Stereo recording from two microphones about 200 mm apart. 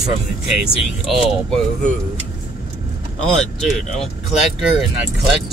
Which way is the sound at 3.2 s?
5° left (ahead or behind).